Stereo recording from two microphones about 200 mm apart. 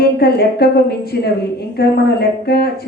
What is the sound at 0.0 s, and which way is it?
A woman's voice, 50° left (ahead or behind).